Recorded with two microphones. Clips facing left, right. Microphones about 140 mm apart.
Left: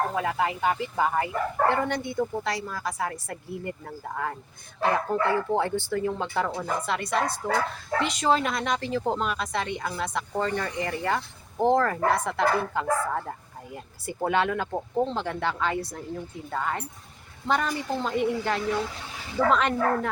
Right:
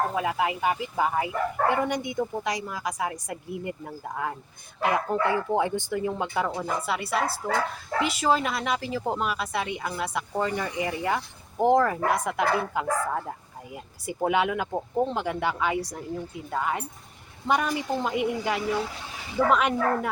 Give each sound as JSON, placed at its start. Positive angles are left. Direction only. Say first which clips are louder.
{"t": 0.1, "sound": "speech", "louder": "even", "side_deg": -10}